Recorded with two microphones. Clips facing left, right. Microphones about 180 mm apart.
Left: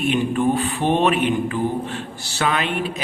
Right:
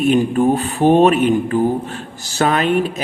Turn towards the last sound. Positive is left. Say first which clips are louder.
# right 7 dB
turn(degrees=-45)  # may be behind; listen again after turning